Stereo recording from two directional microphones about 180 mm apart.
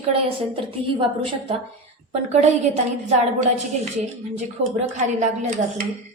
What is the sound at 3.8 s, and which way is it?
A woman's voice, 40° right (ahead or behind).